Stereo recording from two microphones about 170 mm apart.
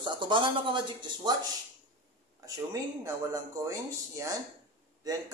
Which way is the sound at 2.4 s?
20° right (ahead or behind).